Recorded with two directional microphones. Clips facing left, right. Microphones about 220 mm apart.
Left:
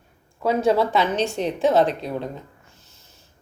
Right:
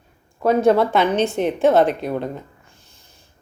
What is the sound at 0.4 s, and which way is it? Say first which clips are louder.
Speech: right 4 dB; 55° right (ahead or behind).